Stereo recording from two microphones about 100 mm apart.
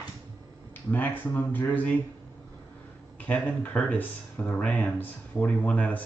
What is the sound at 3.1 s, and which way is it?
Speech, 15° left (ahead or behind).